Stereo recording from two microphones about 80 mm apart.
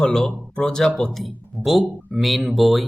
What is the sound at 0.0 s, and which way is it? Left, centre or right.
Speech, centre.